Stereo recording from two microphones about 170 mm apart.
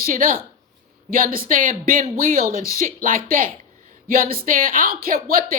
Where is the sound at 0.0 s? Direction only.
55° right (ahead or behind).